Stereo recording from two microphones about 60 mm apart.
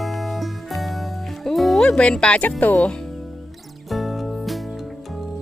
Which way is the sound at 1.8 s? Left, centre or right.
Centre.